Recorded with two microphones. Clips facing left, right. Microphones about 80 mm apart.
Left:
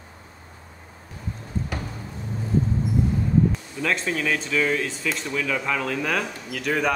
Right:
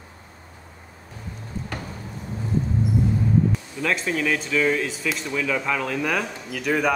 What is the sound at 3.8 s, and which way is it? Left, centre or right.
Speech, centre.